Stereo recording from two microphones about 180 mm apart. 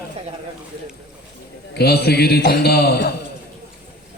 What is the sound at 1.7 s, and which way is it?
A man's voice, 65° left (ahead or behind).